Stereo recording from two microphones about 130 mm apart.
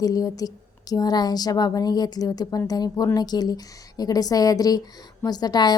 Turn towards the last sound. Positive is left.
turn(degrees=30)  # may be behind; listen again after turning